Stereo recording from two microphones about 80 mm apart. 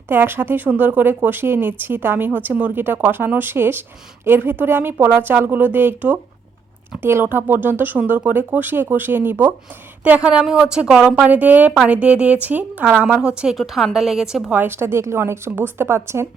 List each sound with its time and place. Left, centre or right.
0.1 s speech: right
10.0 s a woman's voice: centre
11.3 s a woman's voice: centre
13.1 s a woman's voice: centre
13.6 s a woman's voice: centre
14.5 s a woman's voice: right